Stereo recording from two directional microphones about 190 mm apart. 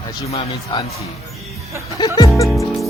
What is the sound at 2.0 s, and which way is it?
Speech, 20° left (ahead or behind).